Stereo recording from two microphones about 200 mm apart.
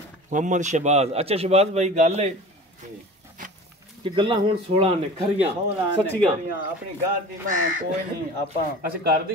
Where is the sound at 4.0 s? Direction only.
25° right (ahead or behind).